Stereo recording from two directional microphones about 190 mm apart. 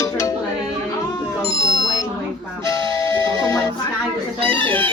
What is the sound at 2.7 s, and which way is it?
Music, 15° left (ahead or behind).